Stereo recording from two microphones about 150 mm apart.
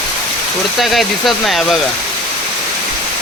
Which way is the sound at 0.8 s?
Centre (ahead or behind).